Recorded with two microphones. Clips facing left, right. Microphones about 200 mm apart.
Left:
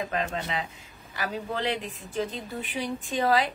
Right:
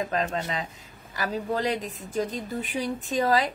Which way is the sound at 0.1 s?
40° right (ahead or behind).